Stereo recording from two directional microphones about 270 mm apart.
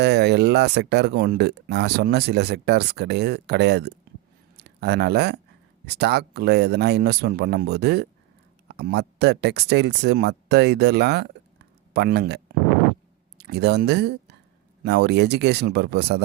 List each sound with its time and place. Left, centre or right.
0.0 s speech: right